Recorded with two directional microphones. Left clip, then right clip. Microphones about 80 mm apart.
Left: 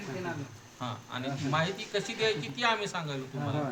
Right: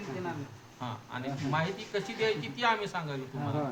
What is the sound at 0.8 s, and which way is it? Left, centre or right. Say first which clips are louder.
A man's voice: left 1 dB; centre.